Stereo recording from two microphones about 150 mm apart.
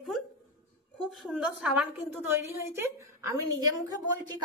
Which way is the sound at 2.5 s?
20° right (ahead or behind).